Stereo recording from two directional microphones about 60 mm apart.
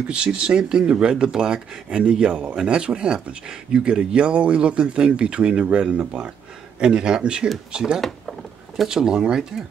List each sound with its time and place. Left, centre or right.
0.1 s speech: centre
8.0 s a sound: centre
8.8 s speech: centre